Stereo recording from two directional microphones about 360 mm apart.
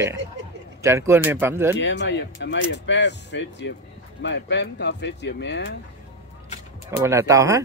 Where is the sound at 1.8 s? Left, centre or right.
Left.